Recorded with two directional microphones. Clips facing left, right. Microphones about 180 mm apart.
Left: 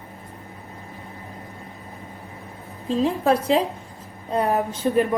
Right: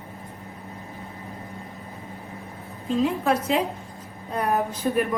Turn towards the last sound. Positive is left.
turn(degrees=30)  # may be behind; listen again after turning